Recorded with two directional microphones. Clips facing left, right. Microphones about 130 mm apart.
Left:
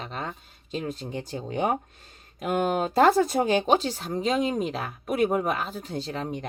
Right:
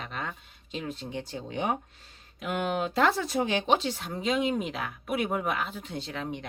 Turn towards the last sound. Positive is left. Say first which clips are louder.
# left 4 dB
turn(degrees=35)  # may be behind; listen again after turning